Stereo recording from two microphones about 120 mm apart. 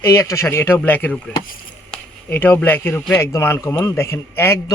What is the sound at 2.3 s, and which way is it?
Speech, 15° left (ahead or behind).